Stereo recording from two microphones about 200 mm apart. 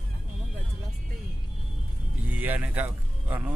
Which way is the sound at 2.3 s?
10° right (ahead or behind).